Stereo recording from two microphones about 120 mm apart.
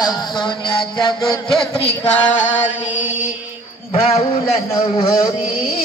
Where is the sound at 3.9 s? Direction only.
60° left (ahead or behind).